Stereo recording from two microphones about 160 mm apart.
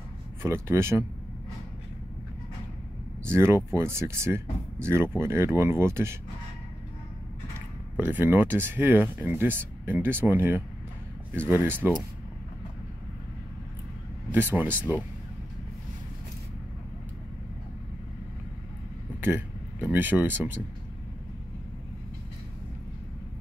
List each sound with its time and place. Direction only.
0.4 s speech: 15° right (ahead or behind)
3.3 s speech: 15° right (ahead or behind)
8.0 s speech: 10° right (ahead or behind)
14.3 s speech: 10° right (ahead or behind)
19.2 s speech: 10° right (ahead or behind)